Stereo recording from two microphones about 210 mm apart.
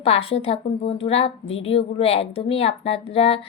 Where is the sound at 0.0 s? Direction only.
30° left (ahead or behind).